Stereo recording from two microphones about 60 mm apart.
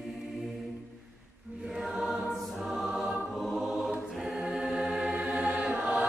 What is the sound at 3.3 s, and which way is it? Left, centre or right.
Music, centre.